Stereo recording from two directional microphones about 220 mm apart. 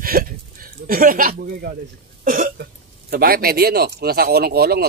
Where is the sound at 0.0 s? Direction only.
40° right (ahead or behind).